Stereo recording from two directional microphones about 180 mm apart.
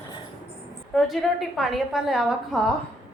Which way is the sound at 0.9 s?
Centre (ahead or behind).